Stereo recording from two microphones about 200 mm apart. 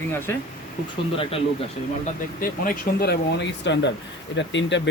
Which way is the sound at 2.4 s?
45° left (ahead or behind).